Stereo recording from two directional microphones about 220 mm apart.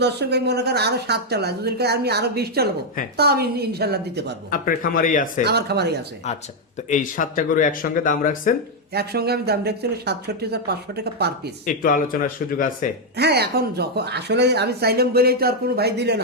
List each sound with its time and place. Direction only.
0.0 s speech: 50° right (ahead or behind)
4.5 s speech: 40° left (ahead or behind)
5.5 s speech: 50° right (ahead or behind)
6.8 s speech: 35° left (ahead or behind)
8.9 s speech: 45° right (ahead or behind)
11.6 s speech: 40° left (ahead or behind)
13.1 s speech: 50° right (ahead or behind)